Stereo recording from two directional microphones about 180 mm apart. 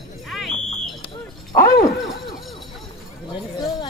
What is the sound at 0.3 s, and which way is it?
Fire alarm, centre (ahead or behind).